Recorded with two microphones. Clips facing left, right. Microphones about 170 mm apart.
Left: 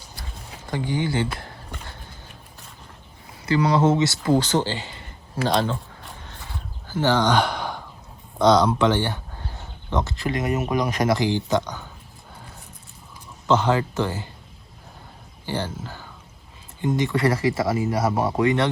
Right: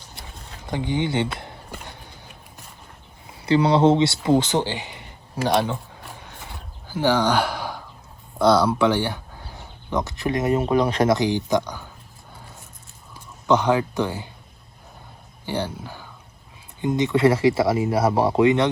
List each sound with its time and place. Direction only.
0.7 s speech: 20° right (ahead or behind)
3.4 s speech: 30° right (ahead or behind)
6.2 s a sound: 15° right (ahead or behind)
8.4 s speech: 10° right (ahead or behind)
13.5 s speech: 15° right (ahead or behind)
15.4 s speech: 15° right (ahead or behind)